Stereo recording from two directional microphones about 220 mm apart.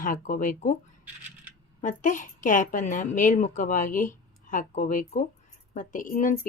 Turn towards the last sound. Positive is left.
turn(degrees=40)  # may be behind; listen again after turning